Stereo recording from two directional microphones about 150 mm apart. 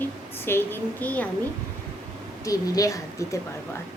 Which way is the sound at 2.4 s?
20° left (ahead or behind).